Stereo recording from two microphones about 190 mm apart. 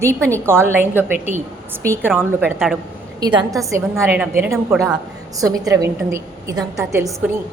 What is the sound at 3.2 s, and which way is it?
A woman's voice, 20° right (ahead or behind).